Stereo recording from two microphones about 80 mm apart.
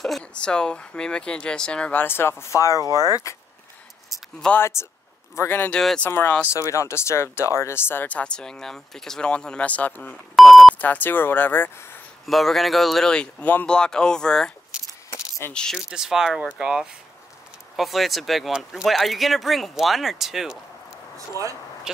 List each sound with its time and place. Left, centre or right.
0.2 s speech: centre
2.0 s speech: left
4.6 s speech: left
5.7 s speech: centre
6.0 s speech: left
10.3 s beep: centre
10.8 s speech: left
12.3 s speech: centre; by 13.7 s left
13.7 s speech: centre
15.0 s keys jangling: left
15.5 s speech: centre
15.9 s speech: centre
21.9 s speech: centre